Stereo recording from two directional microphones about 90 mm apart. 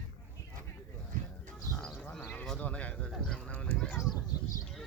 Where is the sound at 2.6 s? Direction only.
15° left (ahead or behind).